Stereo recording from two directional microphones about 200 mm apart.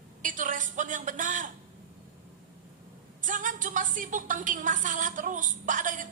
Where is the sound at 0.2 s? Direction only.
40° right (ahead or behind).